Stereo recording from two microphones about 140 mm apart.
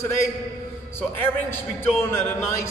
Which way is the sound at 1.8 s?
15° left (ahead or behind).